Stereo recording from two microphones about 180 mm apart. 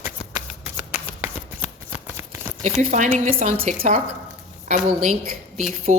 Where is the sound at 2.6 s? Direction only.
40° right (ahead or behind).